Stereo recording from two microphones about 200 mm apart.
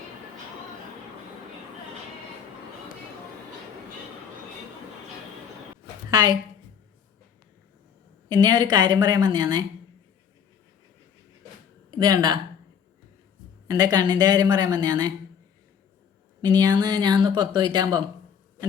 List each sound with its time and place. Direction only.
6.1 s a woman's voice: 20° right (ahead or behind)
8.3 s speech: 20° right (ahead or behind)
11.9 s speech: 20° right (ahead or behind)
13.7 s speech: 20° right (ahead or behind)
16.4 s speech: 20° right (ahead or behind)